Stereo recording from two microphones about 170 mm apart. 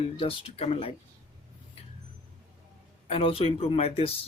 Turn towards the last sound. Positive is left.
turn(degrees=35)  # may be behind; listen again after turning